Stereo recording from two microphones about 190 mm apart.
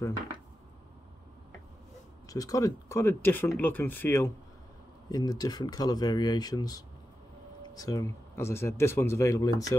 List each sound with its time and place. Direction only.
2.2 s speech: 20° left (ahead or behind)